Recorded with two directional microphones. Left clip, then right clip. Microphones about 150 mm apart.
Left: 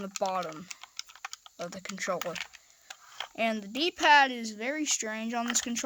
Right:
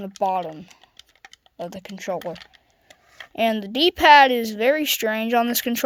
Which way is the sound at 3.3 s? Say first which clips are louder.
Right 9 dB; 35° right (ahead or behind).